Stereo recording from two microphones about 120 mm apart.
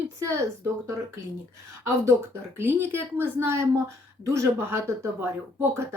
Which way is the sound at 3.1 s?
20° right (ahead or behind).